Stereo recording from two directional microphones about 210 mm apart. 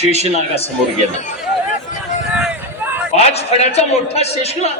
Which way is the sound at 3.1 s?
30° left (ahead or behind).